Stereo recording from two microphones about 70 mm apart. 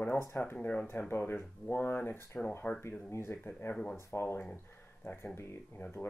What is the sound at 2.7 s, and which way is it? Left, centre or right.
Speech, centre.